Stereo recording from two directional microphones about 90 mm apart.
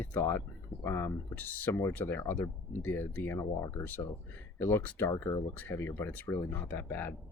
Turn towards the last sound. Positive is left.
turn(degrees=20)  # may be behind; listen again after turning